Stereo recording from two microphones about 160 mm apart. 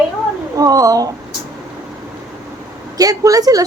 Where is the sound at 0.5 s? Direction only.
20° right (ahead or behind).